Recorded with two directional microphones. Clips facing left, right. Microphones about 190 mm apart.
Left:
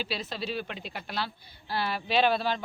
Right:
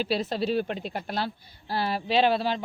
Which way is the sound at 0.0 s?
50° right (ahead or behind).